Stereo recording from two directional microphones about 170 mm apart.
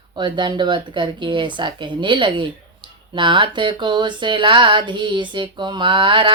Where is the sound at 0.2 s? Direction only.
25° right (ahead or behind).